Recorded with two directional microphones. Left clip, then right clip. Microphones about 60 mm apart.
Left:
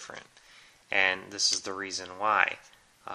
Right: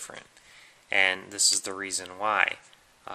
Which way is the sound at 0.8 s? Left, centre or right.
Right.